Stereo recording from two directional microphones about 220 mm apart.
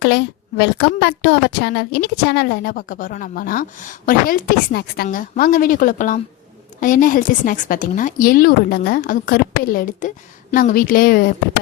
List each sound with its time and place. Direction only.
0.0 s a woman's voice: 50° left (ahead or behind)